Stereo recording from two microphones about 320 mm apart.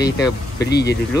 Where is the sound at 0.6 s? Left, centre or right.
Left.